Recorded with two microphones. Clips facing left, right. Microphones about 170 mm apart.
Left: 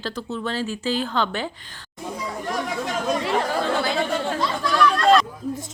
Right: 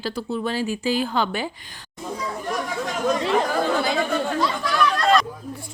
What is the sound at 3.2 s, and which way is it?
Chatter, 20° right (ahead or behind).